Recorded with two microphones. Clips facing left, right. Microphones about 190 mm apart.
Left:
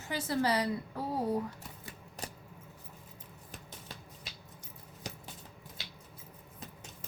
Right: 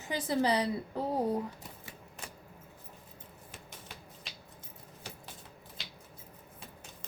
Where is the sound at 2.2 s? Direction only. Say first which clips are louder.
Left 5 dB; 35° left (ahead or behind).